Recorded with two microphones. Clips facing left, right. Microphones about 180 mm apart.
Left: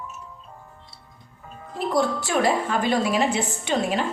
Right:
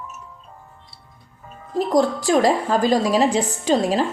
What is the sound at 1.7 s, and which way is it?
A woman's voice, 35° right (ahead or behind).